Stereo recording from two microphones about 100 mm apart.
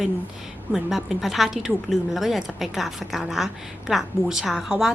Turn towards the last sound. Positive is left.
turn(degrees=-5)  # may be behind; listen again after turning